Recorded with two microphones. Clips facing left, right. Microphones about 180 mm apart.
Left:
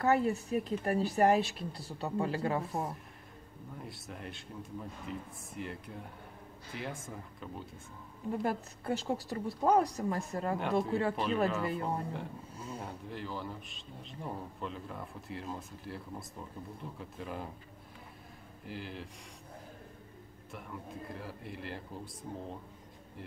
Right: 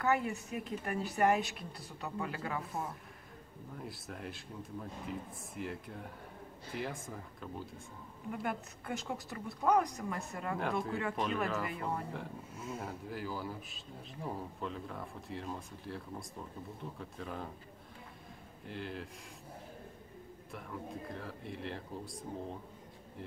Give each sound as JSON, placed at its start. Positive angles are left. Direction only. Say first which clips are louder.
{"t": 0.0, "sound": "speech", "louder": "left 4 dB", "side_deg": 35}
{"t": 3.8, "sound": "a man's voice", "louder": "right 1 dB", "side_deg": 0}
{"t": 8.3, "sound": "speech", "louder": "left 5 dB", "side_deg": 30}
{"t": 10.6, "sound": "a man's voice", "louder": "left 3 dB", "side_deg": 0}
{"t": 10.9, "sound": "speech", "louder": "left 4 dB", "side_deg": 30}
{"t": 12.6, "sound": "a man's voice", "louder": "right 1 dB", "side_deg": -5}
{"t": 18.7, "sound": "a man's voice", "louder": "right 1 dB", "side_deg": 0}
{"t": 20.5, "sound": "a man's voice", "louder": "right 1 dB", "side_deg": 0}